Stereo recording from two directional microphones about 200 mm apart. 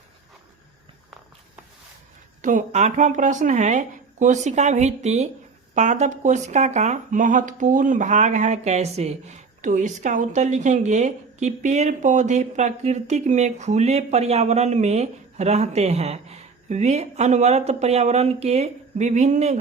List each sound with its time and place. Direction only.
2.4 s speech: 40° right (ahead or behind)